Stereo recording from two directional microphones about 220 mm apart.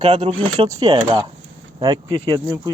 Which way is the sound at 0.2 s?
20° right (ahead or behind).